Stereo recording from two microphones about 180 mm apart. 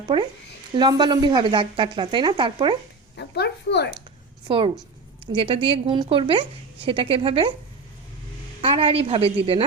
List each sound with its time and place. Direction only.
0.1 s a woman's voice: 30° right (ahead or behind)
3.2 s a child's voice: 65° left (ahead or behind)
4.4 s a woman's voice: 30° right (ahead or behind)
8.6 s a woman's voice: 30° right (ahead or behind)